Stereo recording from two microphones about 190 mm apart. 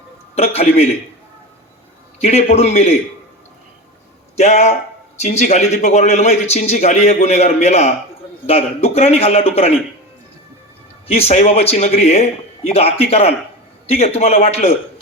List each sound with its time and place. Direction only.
0.3 s a man's voice: 35° left (ahead or behind)
2.2 s a man's voice: 35° left (ahead or behind)
4.4 s a man's voice: 35° left (ahead or behind)
11.1 s a man's voice: 30° left (ahead or behind)